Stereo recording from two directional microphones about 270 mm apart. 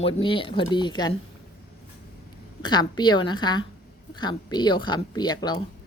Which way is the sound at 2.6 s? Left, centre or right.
Centre.